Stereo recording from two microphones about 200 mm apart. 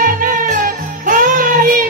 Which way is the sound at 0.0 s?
45° right (ahead or behind).